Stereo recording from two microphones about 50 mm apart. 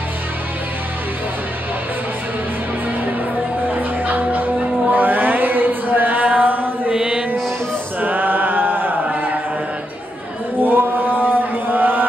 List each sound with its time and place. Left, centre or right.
3.6 s music: right
4.9 s chant: right
7.0 s mantra: right
8.0 s chant: right
10.6 s chant: right